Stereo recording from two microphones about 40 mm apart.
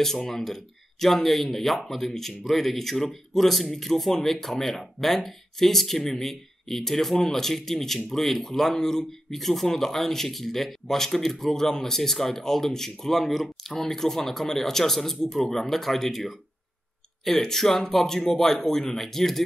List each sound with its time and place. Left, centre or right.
0.3 s speech: centre